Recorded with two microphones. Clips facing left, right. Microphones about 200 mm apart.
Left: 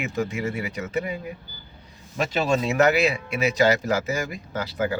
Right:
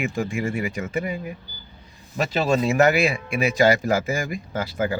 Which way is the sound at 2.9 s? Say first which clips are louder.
Right 1 dB; 50° right (ahead or behind).